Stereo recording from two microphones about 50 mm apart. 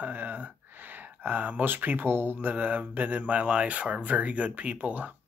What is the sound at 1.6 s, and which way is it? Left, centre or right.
Speech, right.